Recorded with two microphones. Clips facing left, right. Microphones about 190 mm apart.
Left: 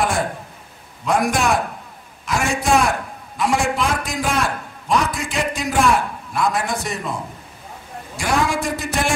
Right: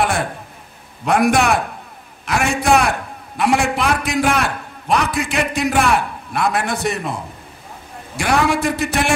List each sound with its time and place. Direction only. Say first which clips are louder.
1.0 s a man's voice: right 4 dB; 65° right (ahead or behind)
8.2 s a man's voice: right 3 dB; 65° right (ahead or behind)